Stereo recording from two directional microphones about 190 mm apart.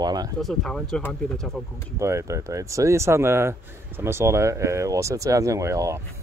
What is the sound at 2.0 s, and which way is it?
Speech, 15° right (ahead or behind).